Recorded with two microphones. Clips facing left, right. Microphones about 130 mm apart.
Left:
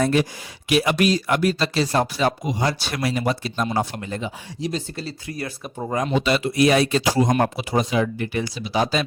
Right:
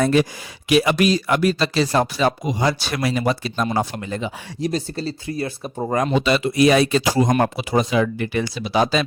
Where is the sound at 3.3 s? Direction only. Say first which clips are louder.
Right 2 dB; 90° right.